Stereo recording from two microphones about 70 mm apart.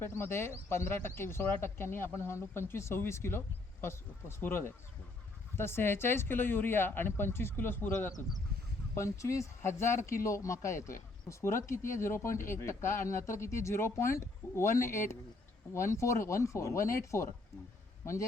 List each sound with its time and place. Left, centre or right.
0.0 s speech: left
9.0 s a man's voice: left